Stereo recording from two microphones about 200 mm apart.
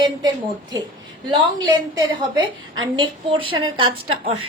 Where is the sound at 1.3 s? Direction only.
20° right (ahead or behind).